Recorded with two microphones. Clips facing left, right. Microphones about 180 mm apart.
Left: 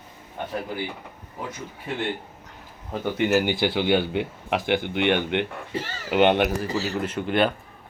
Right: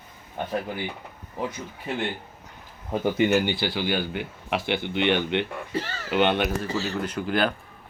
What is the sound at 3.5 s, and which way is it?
A man's voice, 20° left (ahead or behind).